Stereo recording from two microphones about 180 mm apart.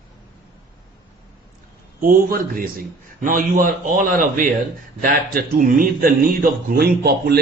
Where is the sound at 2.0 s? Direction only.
50° right (ahead or behind).